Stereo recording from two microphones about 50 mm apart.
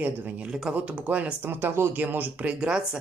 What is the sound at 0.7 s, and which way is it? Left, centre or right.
Speech, right.